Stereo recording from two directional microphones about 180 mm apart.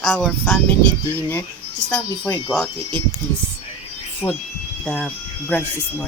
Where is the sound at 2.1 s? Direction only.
20° left (ahead or behind).